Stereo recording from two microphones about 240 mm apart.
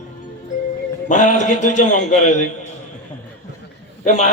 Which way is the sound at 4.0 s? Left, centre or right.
Left.